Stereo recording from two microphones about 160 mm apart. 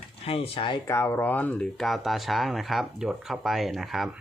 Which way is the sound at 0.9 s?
15° left (ahead or behind).